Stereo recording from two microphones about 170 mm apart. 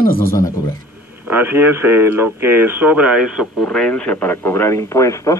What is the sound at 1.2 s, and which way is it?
Speech, 10° right (ahead or behind).